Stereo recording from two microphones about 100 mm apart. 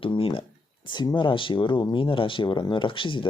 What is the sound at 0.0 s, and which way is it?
Speech, 60° left (ahead or behind).